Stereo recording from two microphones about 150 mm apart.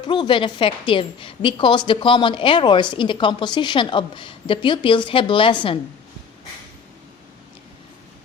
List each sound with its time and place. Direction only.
0.0 s a woman's voice: 30° left (ahead or behind)